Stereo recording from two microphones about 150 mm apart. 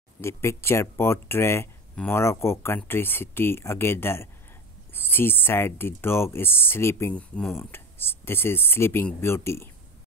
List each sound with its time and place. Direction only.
0.2 s speech: 20° left (ahead or behind)